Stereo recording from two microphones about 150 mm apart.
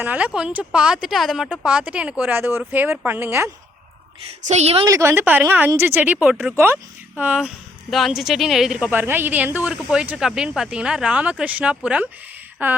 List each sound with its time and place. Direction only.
0.0 s a woman's voice: 10° right (ahead or behind)
4.4 s a woman's voice: 45° right (ahead or behind)
4.9 s a woman's voice: 20° right (ahead or behind)